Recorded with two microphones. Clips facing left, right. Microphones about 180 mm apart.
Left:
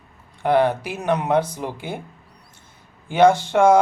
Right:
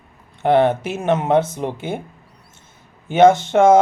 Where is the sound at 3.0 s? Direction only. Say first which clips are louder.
Right 3 dB; 20° right (ahead or behind).